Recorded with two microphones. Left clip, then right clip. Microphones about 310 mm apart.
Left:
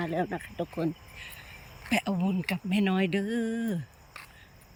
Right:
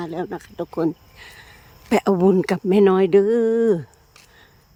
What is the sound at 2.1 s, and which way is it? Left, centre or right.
Speech, right.